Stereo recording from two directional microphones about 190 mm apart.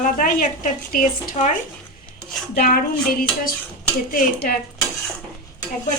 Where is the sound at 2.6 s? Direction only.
50° left (ahead or behind).